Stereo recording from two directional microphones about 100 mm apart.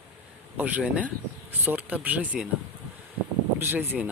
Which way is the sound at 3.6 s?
20° right (ahead or behind).